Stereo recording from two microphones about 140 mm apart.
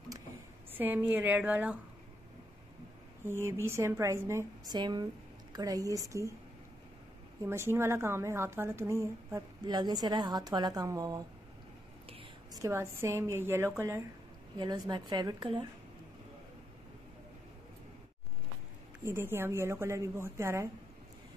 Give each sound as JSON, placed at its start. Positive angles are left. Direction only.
{"t": 0.7, "sound": "a woman's voice", "side_deg": -15}
{"t": 3.4, "sound": "speech", "side_deg": -20}
{"t": 4.7, "sound": "a woman's voice", "side_deg": -30}
{"t": 7.4, "sound": "speech", "side_deg": -20}
{"t": 12.6, "sound": "speech", "side_deg": -20}
{"t": 14.6, "sound": "a woman's voice", "side_deg": -35}
{"t": 19.0, "sound": "speech", "side_deg": -15}